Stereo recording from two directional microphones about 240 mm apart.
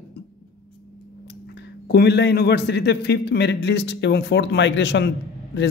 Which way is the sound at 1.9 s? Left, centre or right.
Left.